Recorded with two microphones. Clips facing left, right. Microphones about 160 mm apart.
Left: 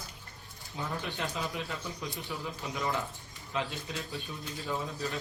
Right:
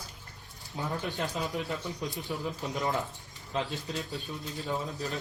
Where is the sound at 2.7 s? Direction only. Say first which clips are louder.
Right 1 dB; 20° right (ahead or behind).